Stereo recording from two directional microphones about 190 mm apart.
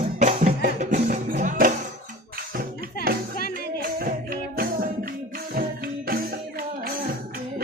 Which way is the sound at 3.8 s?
50° right (ahead or behind).